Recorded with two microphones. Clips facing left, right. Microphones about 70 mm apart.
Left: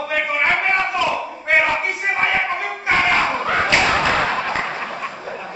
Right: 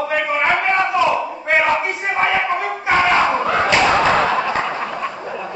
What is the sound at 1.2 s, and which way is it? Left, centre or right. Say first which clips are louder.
Battle cry: right 1 dB; centre.